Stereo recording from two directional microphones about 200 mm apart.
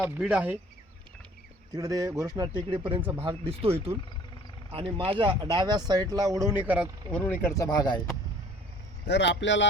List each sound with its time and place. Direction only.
0.0 s speech: 5° right (ahead or behind)
1.7 s speech: 20° right (ahead or behind)
3.0 s speech: 10° right (ahead or behind)
3.2 s speech: 30° right (ahead or behind); by 6.8 s 10° right (ahead or behind)
7.1 s speech: 10° left (ahead or behind)
9.0 s a man's voice: 60° left (ahead or behind)